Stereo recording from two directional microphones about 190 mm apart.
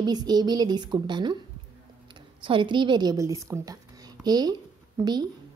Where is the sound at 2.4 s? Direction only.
25° right (ahead or behind).